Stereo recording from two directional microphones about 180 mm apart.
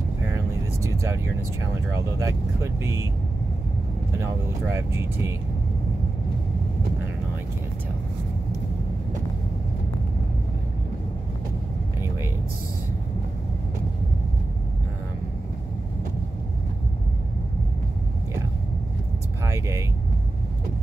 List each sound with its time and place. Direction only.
0.8 s vehicle: 15° right (ahead or behind)
2.1 s speech: 15° right (ahead or behind)
4.2 s speech: 15° right (ahead or behind)
19.4 s vehicle: 15° right (ahead or behind)